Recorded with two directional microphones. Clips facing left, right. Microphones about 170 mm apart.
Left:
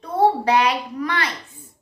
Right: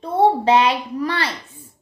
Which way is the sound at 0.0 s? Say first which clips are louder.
Right 2 dB; 25° right (ahead or behind).